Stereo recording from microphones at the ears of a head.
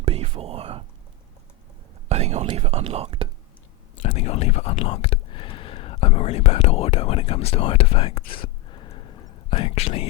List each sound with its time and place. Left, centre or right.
0.0 s whispering: right
2.0 s speech: right
3.9 s whispering: left